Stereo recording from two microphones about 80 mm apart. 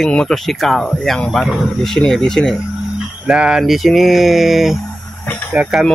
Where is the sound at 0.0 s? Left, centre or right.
Centre.